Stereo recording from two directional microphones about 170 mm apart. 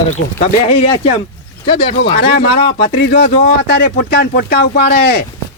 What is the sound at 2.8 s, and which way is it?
Speech, 75° left (ahead or behind).